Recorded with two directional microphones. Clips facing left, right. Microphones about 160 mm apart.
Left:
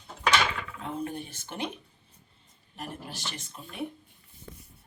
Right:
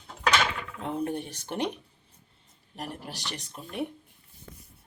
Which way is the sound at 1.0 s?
70° right (ahead or behind).